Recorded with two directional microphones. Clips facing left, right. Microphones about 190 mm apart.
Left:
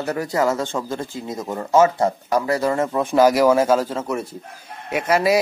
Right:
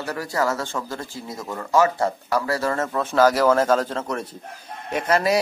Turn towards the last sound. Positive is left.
turn(degrees=10)  # may be behind; listen again after turning